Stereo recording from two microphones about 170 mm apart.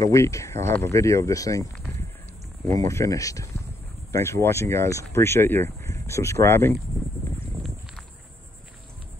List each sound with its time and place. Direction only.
0.0 s speech: 15° left (ahead or behind)
2.9 s speech: 20° left (ahead or behind)